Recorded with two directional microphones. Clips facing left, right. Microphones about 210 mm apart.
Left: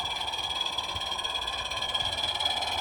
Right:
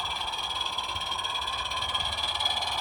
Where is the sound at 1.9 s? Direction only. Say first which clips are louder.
Even; 20° left (ahead or behind).